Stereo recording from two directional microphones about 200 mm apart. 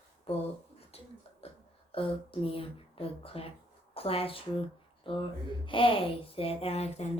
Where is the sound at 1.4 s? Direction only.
30° left (ahead or behind).